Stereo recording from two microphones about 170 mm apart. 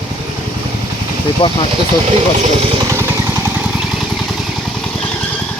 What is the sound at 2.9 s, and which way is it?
Vehicle, 15° right (ahead or behind).